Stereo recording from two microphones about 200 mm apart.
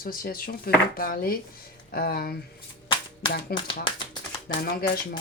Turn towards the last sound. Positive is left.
turn(degrees=50)  # may be behind; listen again after turning